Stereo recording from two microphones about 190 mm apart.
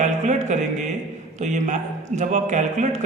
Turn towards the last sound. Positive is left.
turn(degrees=-40)  # may be behind; listen again after turning